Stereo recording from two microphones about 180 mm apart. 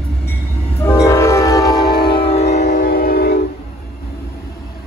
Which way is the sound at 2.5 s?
50° left (ahead or behind).